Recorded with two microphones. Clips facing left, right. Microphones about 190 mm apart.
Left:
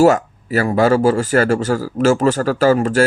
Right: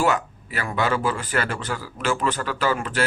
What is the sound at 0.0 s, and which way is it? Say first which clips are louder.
Speech: left 10 dB; 45° left (ahead or behind).